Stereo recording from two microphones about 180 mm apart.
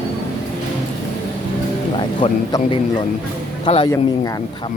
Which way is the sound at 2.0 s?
25° left (ahead or behind).